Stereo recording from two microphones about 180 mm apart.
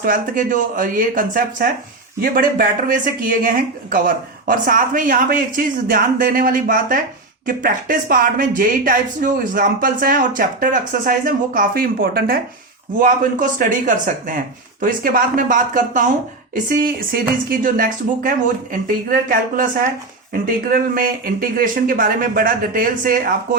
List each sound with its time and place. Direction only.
0.0 s speech: 50° right (ahead or behind)